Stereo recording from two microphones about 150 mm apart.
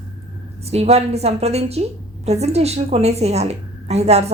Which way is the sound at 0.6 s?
45° right (ahead or behind).